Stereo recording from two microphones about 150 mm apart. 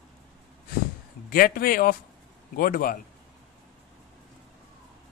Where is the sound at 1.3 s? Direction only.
75° left (ahead or behind).